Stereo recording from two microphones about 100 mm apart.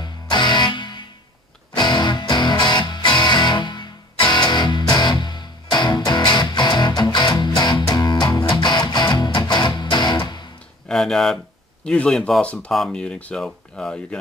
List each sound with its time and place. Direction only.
0.0 s music: 50° left (ahead or behind)
10.9 s speech: 5° left (ahead or behind)